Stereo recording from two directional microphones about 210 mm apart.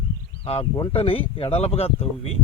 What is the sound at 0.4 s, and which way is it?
Speech, 25° left (ahead or behind).